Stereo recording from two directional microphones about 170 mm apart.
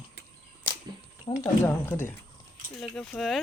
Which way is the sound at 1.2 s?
20° left (ahead or behind).